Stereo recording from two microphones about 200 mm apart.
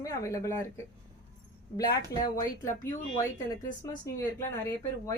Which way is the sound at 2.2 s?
15° left (ahead or behind).